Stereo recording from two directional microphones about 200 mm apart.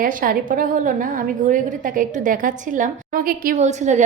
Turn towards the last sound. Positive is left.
turn(degrees=-35)  # may be behind; listen again after turning